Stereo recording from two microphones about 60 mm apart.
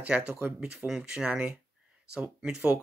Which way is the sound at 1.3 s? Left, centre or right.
Right.